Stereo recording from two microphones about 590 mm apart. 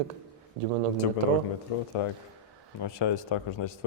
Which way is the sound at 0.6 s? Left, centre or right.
Right.